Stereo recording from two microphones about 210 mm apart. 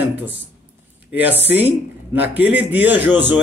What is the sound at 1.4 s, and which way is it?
A man's voice, 10° right (ahead or behind).